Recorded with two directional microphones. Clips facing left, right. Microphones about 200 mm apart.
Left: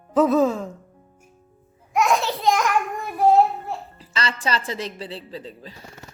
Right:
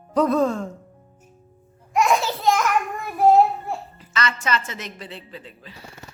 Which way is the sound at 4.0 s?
30° left (ahead or behind).